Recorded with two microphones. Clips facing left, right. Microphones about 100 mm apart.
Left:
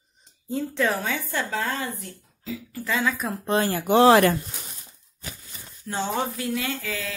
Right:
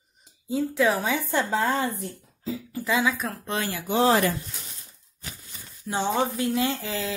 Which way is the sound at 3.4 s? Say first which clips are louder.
Left 9 dB; 35° left (ahead or behind).